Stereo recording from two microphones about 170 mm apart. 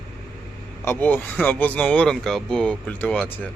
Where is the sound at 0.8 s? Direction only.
10° left (ahead or behind).